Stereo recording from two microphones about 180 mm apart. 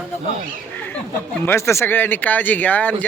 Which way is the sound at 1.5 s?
15° left (ahead or behind).